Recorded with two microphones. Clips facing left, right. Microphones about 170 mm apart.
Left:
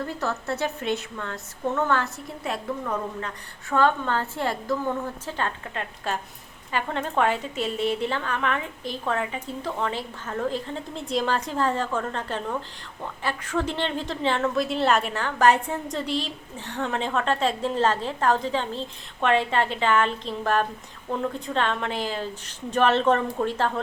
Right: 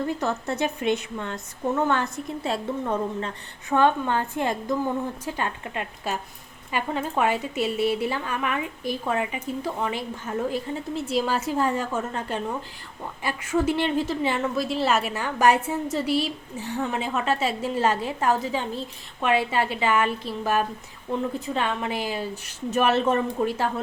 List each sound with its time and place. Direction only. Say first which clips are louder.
0.2 s a woman's voice: right 2 dB; 20° right (ahead or behind)